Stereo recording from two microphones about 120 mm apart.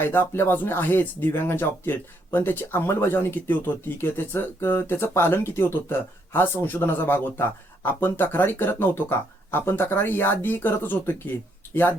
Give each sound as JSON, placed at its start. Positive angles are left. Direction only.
{"t": 0.0, "sound": "speech", "side_deg": 15}